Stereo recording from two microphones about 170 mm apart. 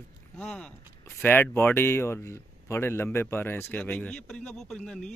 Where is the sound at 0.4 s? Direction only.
5° left (ahead or behind).